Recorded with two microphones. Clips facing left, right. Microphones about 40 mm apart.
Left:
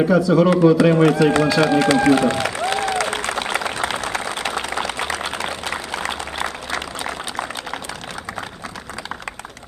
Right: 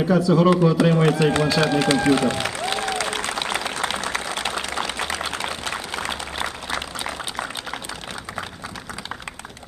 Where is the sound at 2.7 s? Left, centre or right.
Left.